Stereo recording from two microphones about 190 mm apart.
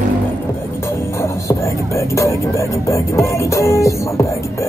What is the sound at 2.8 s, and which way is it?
Music, 15° left (ahead or behind).